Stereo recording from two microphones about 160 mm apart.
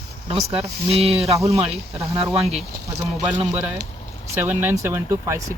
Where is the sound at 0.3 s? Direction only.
40° right (ahead or behind).